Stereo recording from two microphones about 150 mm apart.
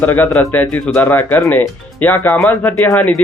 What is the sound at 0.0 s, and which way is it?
Speech, 10° left (ahead or behind).